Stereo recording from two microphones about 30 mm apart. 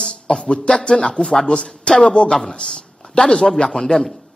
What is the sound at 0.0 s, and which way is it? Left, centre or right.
A man's voice, left.